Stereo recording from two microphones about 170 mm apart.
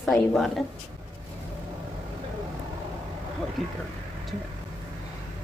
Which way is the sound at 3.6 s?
Centre (ahead or behind).